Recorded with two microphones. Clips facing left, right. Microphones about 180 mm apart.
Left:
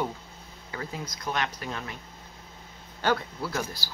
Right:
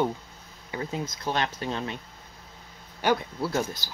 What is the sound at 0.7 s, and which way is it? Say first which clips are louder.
Speech: right 4 dB; 25° right (ahead or behind).